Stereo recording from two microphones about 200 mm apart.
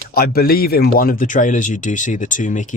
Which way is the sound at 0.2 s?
50° left (ahead or behind).